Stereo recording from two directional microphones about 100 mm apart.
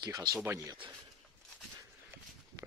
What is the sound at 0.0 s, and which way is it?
Speech, 45° right (ahead or behind).